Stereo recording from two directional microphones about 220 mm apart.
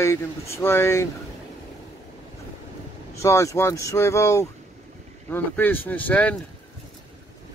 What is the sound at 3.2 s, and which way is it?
Speech, 15° left (ahead or behind).